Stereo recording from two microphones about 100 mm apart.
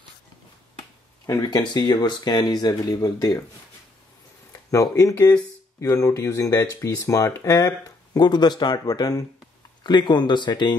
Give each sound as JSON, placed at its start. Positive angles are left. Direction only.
{"t": 1.4, "sound": "speech", "side_deg": 50}
{"t": 4.5, "sound": "a sound", "side_deg": 35}
{"t": 5.8, "sound": "speech", "side_deg": 35}